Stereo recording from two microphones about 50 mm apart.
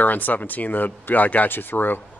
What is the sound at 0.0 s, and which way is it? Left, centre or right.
Speech, left.